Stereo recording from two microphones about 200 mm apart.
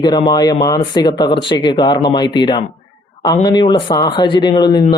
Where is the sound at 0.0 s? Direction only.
20° left (ahead or behind).